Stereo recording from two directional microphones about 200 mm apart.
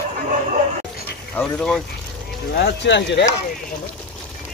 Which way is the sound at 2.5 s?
60° left (ahead or behind).